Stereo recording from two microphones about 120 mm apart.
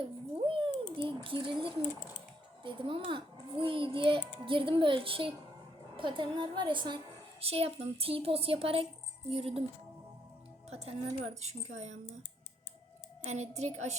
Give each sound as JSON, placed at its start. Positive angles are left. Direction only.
{"t": 0.4, "sound": "a sound", "side_deg": -45}
{"t": 2.6, "sound": "a child's voice", "side_deg": -45}
{"t": 7.4, "sound": "a child's voice", "side_deg": -55}
{"t": 10.7, "sound": "a woman's voice", "side_deg": -60}
{"t": 13.2, "sound": "a woman's voice", "side_deg": -65}